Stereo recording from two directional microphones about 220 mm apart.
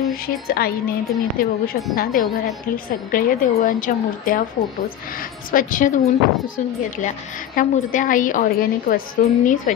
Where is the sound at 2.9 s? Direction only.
40° left (ahead or behind).